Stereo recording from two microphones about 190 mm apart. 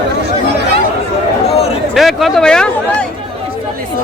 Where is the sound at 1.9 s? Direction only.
Centre (ahead or behind).